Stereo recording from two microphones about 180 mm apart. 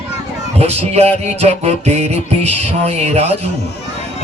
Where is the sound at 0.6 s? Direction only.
35° right (ahead or behind).